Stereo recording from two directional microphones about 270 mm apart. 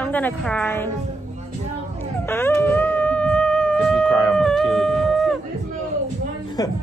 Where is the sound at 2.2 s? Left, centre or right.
Centre.